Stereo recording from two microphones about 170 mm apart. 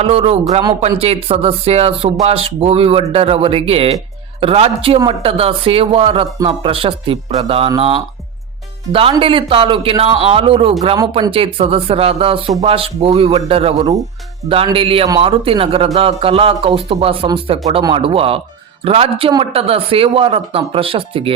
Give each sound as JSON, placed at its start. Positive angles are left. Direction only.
{"t": 0.0, "sound": "speech", "side_deg": -35}
{"t": 8.9, "sound": "speech", "side_deg": -30}
{"t": 15.0, "sound": "speech", "side_deg": -20}
{"t": 15.3, "sound": "speech", "side_deg": -35}